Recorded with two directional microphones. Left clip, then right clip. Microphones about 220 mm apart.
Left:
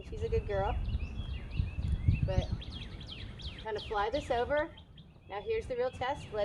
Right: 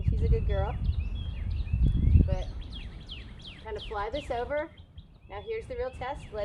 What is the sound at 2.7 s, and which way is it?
Bird, centre (ahead or behind).